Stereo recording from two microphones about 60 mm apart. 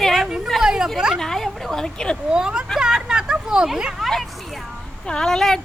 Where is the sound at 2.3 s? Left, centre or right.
Centre.